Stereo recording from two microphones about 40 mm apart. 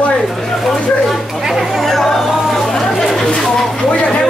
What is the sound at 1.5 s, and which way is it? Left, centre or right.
Chatter, centre.